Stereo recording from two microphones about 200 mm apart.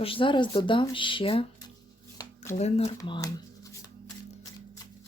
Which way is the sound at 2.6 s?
30° left (ahead or behind).